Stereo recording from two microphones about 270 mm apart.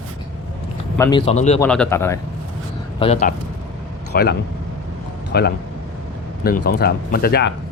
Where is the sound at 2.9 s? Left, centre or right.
Left.